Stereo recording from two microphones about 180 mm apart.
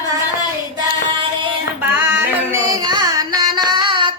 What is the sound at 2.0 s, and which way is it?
Carnatic music, 15° right (ahead or behind).